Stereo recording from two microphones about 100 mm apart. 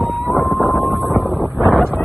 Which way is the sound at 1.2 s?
15° right (ahead or behind).